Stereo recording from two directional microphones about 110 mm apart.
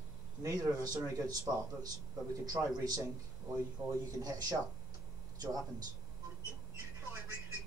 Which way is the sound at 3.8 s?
25° right (ahead or behind).